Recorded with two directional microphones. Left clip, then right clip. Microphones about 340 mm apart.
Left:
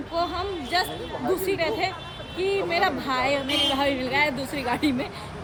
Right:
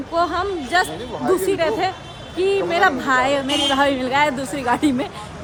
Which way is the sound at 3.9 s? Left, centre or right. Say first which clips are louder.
Right 5 dB; centre.